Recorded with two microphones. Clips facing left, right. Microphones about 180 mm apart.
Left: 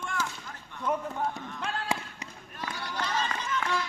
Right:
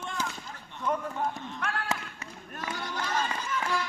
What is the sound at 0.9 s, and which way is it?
Run, centre (ahead or behind).